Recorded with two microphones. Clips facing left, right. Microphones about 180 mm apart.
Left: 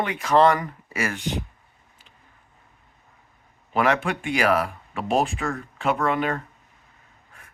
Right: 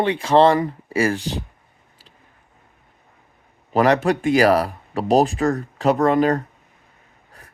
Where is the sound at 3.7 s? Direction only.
40° right (ahead or behind).